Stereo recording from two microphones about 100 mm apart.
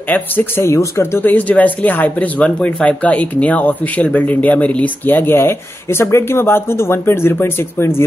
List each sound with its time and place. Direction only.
0.1 s speech: 20° left (ahead or behind)
1.2 s speech: 15° left (ahead or behind)